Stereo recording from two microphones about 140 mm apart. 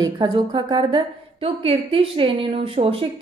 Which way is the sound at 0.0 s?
35° right (ahead or behind).